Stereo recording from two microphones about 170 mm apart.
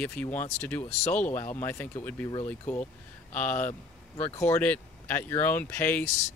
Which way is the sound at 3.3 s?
10° left (ahead or behind).